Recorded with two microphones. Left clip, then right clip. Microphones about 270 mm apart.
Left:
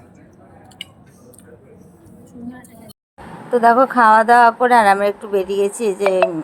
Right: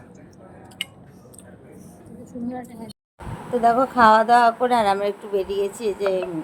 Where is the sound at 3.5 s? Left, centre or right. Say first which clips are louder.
Left 6 dB; centre.